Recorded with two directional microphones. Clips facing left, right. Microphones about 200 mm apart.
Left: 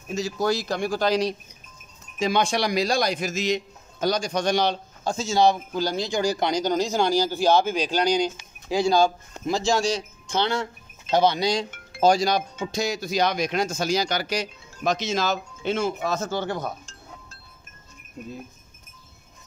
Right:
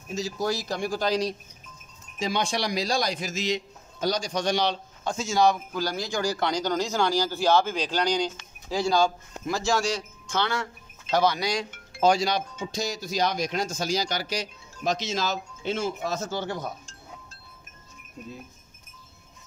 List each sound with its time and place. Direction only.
0.1 s speech: 60° left (ahead or behind)
2.1 s a man's voice: 55° left (ahead or behind)
5.1 s speech: 30° left (ahead or behind)
12.0 s speech: 40° left (ahead or behind)
12.5 s speech: 60° left (ahead or behind)